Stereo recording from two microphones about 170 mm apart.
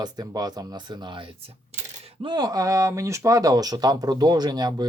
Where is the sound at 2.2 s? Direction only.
20° right (ahead or behind).